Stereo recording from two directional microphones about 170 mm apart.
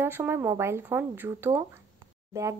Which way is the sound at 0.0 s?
15° right (ahead or behind).